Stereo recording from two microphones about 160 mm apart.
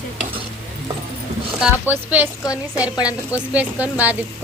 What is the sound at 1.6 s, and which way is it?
Speech, 10° right (ahead or behind).